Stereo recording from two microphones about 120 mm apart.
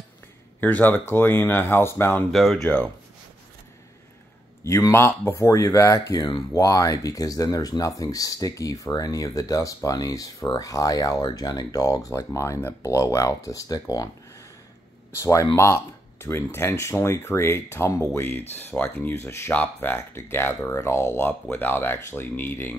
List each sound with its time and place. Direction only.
0.6 s speech: 15° left (ahead or behind)
2.3 s speech: 5° left (ahead or behind)
4.6 s speech: 25° left (ahead or behind)
15.1 s speech: 25° left (ahead or behind)